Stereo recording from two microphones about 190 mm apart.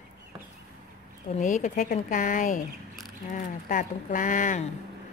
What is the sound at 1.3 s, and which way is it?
A woman's voice, 40° left (ahead or behind).